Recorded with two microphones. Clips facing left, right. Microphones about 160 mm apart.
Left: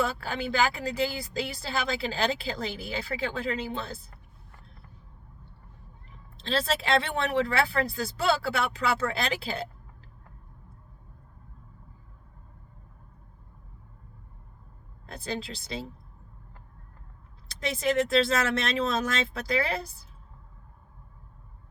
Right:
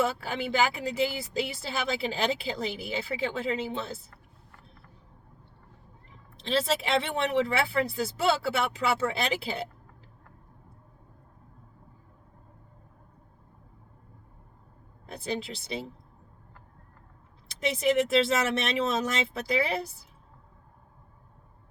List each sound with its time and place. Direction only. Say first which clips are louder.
0.0 s speech: right 1 dB; 20° right (ahead or behind)
6.4 s speech: right 1 dB; 20° right (ahead or behind)
15.0 s speech: right 1 dB; 20° right (ahead or behind)
17.5 s speech: right 2 dB; 20° right (ahead or behind)